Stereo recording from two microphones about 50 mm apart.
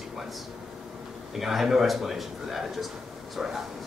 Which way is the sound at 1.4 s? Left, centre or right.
Centre.